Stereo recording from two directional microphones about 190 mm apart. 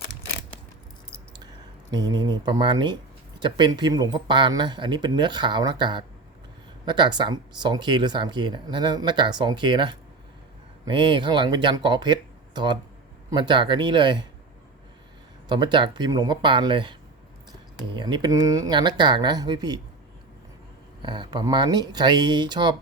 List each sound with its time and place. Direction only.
1.9 s speech: 20° right (ahead or behind)
15.4 s speech: 25° right (ahead or behind)
21.0 s speech: 25° right (ahead or behind)